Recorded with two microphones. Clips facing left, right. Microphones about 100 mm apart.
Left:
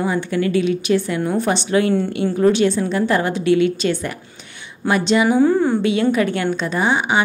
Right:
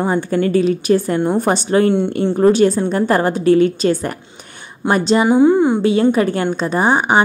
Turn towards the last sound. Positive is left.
turn(degrees=-45)  # may be behind; listen again after turning